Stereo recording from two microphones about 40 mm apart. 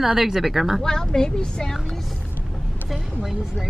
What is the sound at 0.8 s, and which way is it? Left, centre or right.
Speech, centre.